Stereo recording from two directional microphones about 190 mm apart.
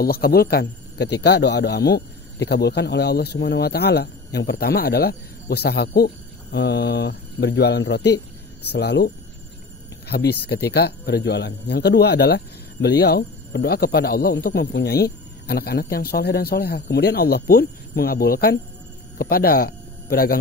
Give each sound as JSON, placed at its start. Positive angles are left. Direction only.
{"t": 0.0, "sound": "speech", "side_deg": 55}